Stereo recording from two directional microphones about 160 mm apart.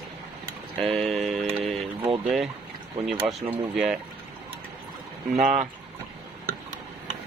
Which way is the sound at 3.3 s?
Centre (ahead or behind).